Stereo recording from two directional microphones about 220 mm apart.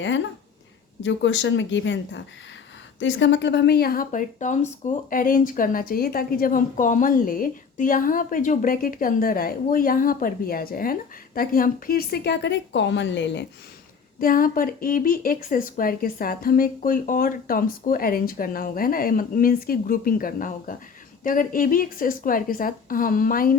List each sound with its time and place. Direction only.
1.0 s a woman's voice: 55° left (ahead or behind)
14.2 s speech: 40° left (ahead or behind)